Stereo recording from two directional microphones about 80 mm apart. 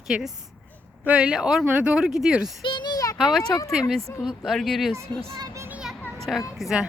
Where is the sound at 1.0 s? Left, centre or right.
Centre.